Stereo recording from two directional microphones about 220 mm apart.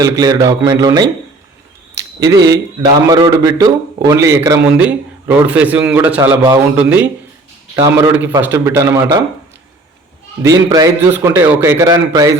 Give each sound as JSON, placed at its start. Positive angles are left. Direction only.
{"t": 0.0, "sound": "speech", "side_deg": -15}
{"t": 10.4, "sound": "speech", "side_deg": -15}